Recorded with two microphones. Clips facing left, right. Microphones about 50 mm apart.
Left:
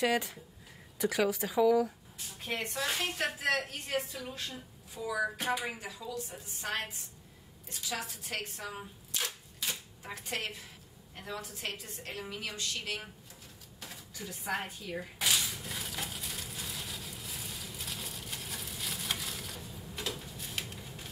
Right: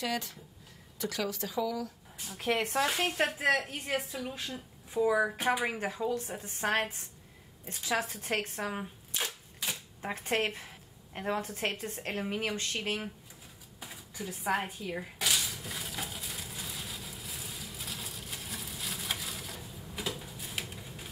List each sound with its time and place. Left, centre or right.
0.0 s speech: centre
2.3 s speech: right
2.9 s a woman's voice: right
4.9 s a woman's voice: right
5.4 s speech: centre
5.7 s speech: right
9.1 s shuffling cards: centre
10.0 s speech: right
13.7 s speech: centre
15.6 s a sound: centre